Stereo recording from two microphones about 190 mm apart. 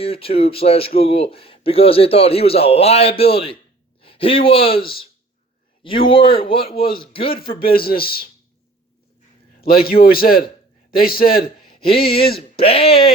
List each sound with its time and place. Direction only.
0.0 s a man's voice: 30° left (ahead or behind)
4.8 s a man's voice: 55° left (ahead or behind)
6.1 s speech: 30° left (ahead or behind)
6.7 s a man's voice: 50° left (ahead or behind)
7.1 s speech: 30° left (ahead or behind)
7.5 s a man's voice: 50° left (ahead or behind)
9.6 s a man's voice: 55° left (ahead or behind)
11.7 s a sound: 30° left (ahead or behind)
12.4 s a man's voice: 30° left (ahead or behind)